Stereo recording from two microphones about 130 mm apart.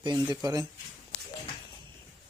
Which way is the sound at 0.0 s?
35° right (ahead or behind).